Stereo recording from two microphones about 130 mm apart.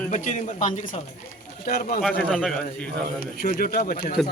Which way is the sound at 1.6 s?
90° left.